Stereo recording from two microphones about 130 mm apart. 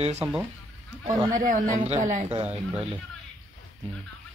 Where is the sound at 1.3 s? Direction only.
85° right.